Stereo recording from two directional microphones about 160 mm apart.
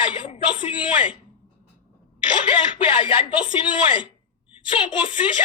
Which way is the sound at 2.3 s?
30° left (ahead or behind).